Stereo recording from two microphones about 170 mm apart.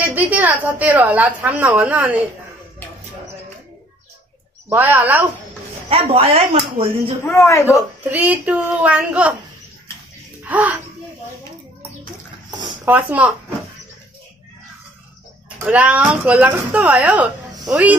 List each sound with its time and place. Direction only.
0.1 s speech: 10° right (ahead or behind)
4.6 s speech: 10° right (ahead or behind)
5.9 s speech: 35° right (ahead or behind)
7.2 s a man's voice: 15° left (ahead or behind)
8.0 s speech: 10° right (ahead or behind)
10.4 s a child's voice: 10° right (ahead or behind)
12.4 s dog: 25° right (ahead or behind)
12.8 s speech: 10° right (ahead or behind)
15.6 s speech: 10° right (ahead or behind)